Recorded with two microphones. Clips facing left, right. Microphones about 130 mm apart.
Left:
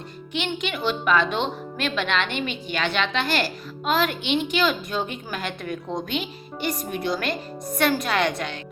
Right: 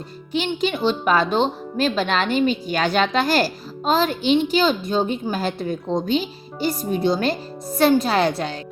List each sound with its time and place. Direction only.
0.3 s speech: 35° right (ahead or behind)